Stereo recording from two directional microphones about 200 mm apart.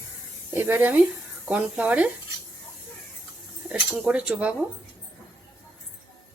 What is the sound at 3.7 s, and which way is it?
Speech, 5° right (ahead or behind).